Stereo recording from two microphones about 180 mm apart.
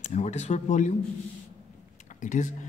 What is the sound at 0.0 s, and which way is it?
Speech, 40° left (ahead or behind).